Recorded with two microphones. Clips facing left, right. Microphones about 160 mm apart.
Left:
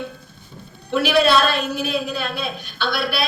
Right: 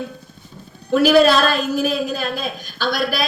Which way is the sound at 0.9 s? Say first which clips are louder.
Right 4 dB; 40° right (ahead or behind).